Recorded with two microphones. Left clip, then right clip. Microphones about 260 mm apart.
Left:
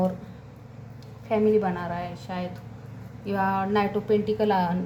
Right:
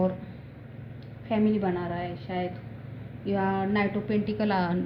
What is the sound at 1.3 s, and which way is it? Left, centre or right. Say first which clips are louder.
Speech: left 5 dB; left.